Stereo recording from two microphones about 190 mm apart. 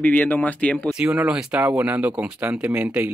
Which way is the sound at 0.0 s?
10° left (ahead or behind).